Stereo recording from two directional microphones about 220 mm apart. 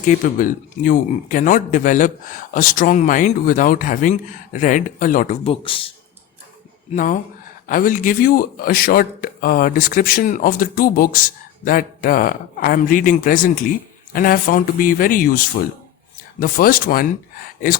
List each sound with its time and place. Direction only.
0.0 s speech: 35° left (ahead or behind)
6.9 s speech: 35° left (ahead or behind)